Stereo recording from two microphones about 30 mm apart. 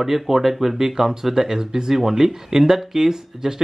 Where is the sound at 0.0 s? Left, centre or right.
Centre.